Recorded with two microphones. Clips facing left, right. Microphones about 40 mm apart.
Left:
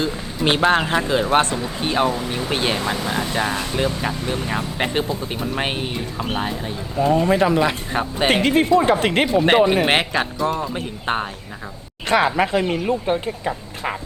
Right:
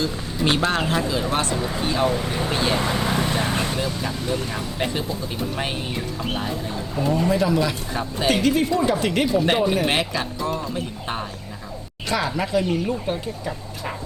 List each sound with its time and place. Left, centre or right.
0.0 s speech: left
1.3 s speech: left